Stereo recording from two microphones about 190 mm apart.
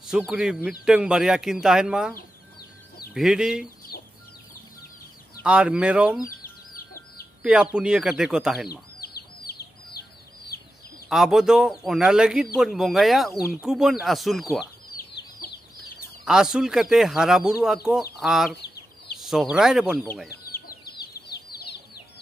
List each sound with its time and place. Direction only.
0.1 s speech: 5° right (ahead or behind)
3.2 s speech: 5° right (ahead or behind)
3.9 s chicken: 55° left (ahead or behind)
5.4 s speech: 5° right (ahead or behind)
7.4 s speech: 5° right (ahead or behind)
8.6 s chicken: 55° left (ahead or behind)
11.1 s speech: centre (ahead or behind)
16.3 s speech: 5° right (ahead or behind)
20.2 s chicken: 50° left (ahead or behind)